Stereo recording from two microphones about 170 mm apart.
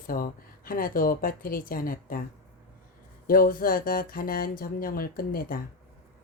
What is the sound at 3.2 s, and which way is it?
Speech, 55° left (ahead or behind).